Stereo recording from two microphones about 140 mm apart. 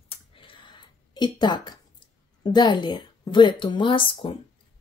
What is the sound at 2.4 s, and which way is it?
Speech, 30° left (ahead or behind).